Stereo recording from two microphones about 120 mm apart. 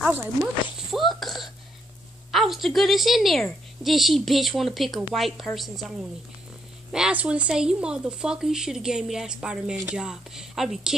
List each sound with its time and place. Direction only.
0.1 s speech: 20° right (ahead or behind)
0.7 s a woman's voice: centre (ahead or behind)